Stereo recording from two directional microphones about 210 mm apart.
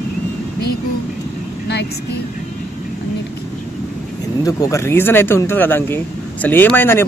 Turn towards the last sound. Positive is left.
turn(degrees=10)  # may be behind; listen again after turning